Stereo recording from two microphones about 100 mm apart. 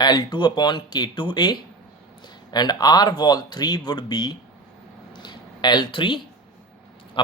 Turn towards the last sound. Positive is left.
turn(degrees=55)  # may be behind; listen again after turning